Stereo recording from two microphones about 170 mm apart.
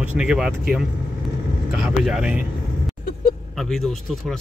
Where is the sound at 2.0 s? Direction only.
5° right (ahead or behind).